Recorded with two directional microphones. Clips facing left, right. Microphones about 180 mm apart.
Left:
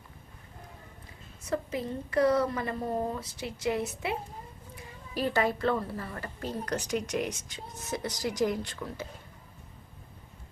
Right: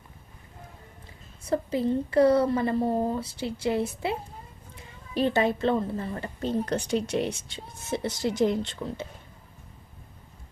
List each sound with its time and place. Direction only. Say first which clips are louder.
1.5 s a woman's voice: right 7 dB; 30° right (ahead or behind)